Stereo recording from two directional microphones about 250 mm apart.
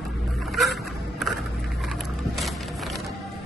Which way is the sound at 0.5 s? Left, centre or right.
Centre.